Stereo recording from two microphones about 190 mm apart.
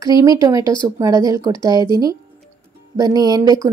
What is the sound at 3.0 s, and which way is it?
Speech, 20° right (ahead or behind).